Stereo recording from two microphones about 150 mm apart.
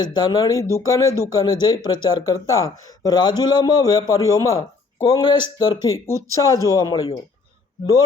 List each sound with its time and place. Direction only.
0.0 s a man's voice: 25° left (ahead or behind)